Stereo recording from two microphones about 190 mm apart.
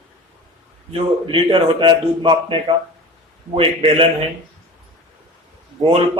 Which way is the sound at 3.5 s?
30° right (ahead or behind).